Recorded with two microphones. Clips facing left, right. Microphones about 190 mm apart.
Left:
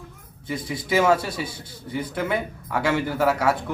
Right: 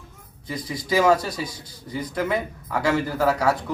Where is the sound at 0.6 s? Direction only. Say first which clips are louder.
Right 1 dB; 25° left (ahead or behind).